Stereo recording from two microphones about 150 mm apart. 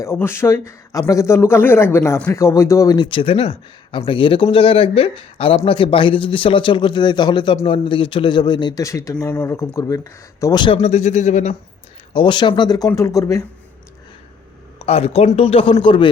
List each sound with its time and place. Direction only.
0.0 s speech: 15° left (ahead or behind)
10.8 s speech: 45° left (ahead or behind)
12.1 s speech: 30° left (ahead or behind)
14.8 s speech: 40° left (ahead or behind)